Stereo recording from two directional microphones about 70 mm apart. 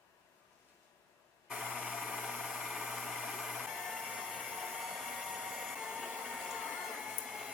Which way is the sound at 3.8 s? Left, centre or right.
Centre.